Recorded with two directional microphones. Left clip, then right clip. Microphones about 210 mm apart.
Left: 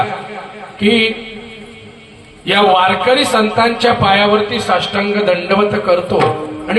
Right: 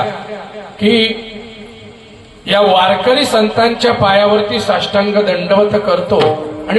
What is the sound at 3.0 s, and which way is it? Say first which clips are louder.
A man's voice: right 1 dB; 20° left (ahead or behind).